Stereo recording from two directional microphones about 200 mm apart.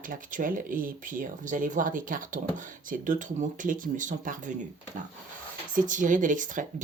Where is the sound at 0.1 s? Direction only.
40° right (ahead or behind).